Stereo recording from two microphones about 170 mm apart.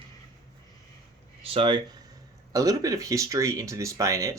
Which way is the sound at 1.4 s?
35° right (ahead or behind).